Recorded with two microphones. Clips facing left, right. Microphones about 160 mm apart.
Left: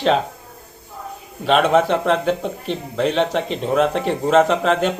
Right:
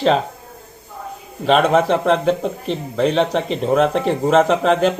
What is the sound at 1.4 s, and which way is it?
Speech, centre (ahead or behind).